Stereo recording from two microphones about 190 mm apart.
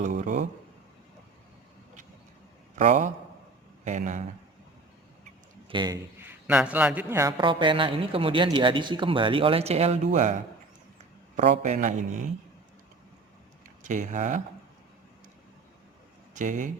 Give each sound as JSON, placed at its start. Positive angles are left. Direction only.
{"t": 0.2, "sound": "a man's voice", "side_deg": -40}
{"t": 2.7, "sound": "a man's voice", "side_deg": -40}
{"t": 5.6, "sound": "a man's voice", "side_deg": -25}
{"t": 6.1, "sound": "a man's voice", "side_deg": -10}
{"t": 13.8, "sound": "a man's voice", "side_deg": -40}
{"t": 16.3, "sound": "speech", "side_deg": -40}